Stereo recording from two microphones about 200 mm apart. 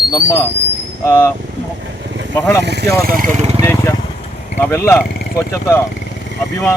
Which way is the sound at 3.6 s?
15° left (ahead or behind).